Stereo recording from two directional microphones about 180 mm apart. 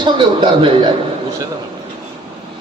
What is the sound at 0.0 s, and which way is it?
Speech, 25° right (ahead or behind).